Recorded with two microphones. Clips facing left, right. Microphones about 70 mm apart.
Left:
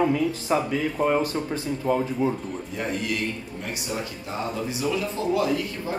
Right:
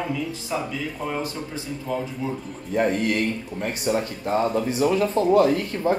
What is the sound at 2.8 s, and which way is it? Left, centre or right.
Speech, right.